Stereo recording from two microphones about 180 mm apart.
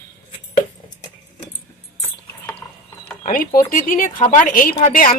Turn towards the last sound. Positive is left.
turn(degrees=45)  # may be behind; listen again after turning